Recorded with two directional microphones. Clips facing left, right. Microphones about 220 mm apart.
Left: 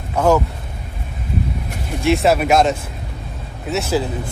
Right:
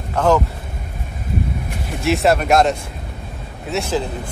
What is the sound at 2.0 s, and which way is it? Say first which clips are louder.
Speech: left 1 dB; centre (ahead or behind).